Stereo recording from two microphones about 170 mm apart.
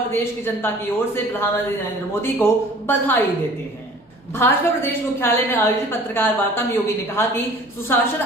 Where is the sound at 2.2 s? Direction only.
15° left (ahead or behind).